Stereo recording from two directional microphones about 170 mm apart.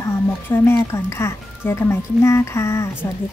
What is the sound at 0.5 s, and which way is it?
Speech, 15° left (ahead or behind).